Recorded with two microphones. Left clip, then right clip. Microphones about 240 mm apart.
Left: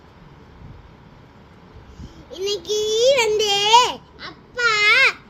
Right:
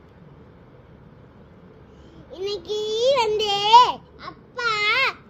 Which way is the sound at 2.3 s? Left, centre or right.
Left.